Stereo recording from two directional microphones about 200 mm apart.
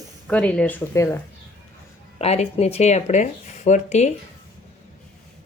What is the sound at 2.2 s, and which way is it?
Speech, 30° left (ahead or behind).